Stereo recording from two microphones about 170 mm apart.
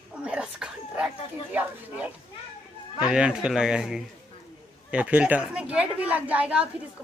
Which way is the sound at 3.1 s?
5° right (ahead or behind).